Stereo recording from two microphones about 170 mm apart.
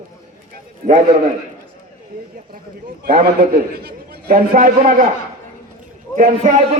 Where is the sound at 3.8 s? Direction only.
65° right (ahead or behind).